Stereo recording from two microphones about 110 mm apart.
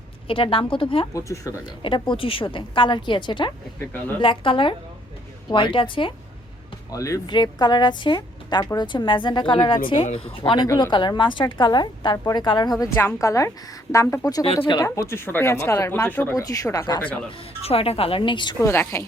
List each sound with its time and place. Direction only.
0.3 s a woman's voice: 55° left (ahead or behind)
1.1 s speech: 30° left (ahead or behind)
1.8 s a woman's voice: 50° left (ahead or behind)
6.9 s speech: 30° left (ahead or behind)
7.3 s a woman's voice: 45° left (ahead or behind)
10.1 s a woman's voice: 60° left (ahead or behind); by 12.7 s 40° left (ahead or behind)
12.8 s speech: 20° left (ahead or behind)
14.4 s speech: 65° left (ahead or behind)
14.8 s speech: 30° left (ahead or behind)
16.3 s speech: 30° left (ahead or behind)
17.0 s speech: 15° left (ahead or behind)
17.6 s speech: 65° left (ahead or behind); by 18.5 s 45° left (ahead or behind)
18.6 s speech: 25° left (ahead or behind)